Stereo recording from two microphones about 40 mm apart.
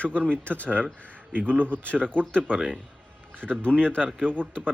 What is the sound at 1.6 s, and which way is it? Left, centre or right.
Speech, right.